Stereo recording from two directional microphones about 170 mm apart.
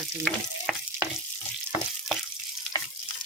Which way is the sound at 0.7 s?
5° right (ahead or behind).